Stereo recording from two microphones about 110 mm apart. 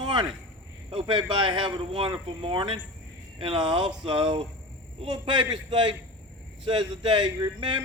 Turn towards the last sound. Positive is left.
turn(degrees=-45)  # may be behind; listen again after turning